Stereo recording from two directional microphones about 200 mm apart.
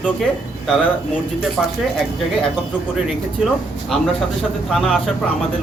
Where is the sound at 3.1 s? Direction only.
Centre (ahead or behind).